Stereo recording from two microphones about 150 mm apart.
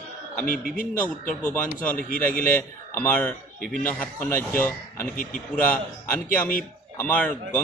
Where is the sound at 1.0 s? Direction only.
10° left (ahead or behind).